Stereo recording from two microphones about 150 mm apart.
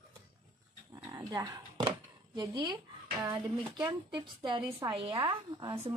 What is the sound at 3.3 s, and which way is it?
A woman's voice, 30° right (ahead or behind).